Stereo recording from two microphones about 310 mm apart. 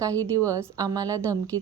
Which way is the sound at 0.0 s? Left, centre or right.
Centre.